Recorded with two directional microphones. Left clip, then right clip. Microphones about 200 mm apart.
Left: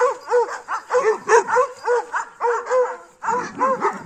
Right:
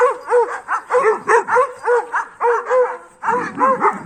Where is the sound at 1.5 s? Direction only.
15° right (ahead or behind).